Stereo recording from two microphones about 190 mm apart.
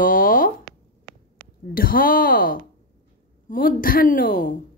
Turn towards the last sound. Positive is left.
turn(degrees=45)  # may be behind; listen again after turning